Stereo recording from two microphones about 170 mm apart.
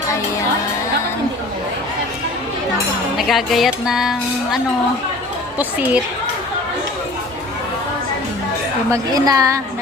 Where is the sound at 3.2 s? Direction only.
Centre (ahead or behind).